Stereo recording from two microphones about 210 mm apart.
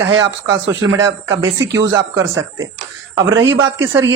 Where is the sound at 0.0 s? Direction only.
60° right (ahead or behind).